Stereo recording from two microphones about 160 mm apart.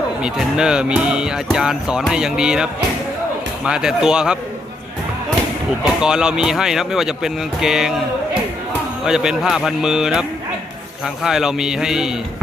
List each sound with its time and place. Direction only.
0.2 s speech: 5° right (ahead or behind)
5.8 s speech: 5° right (ahead or behind)
9.0 s speech: 5° right (ahead or behind)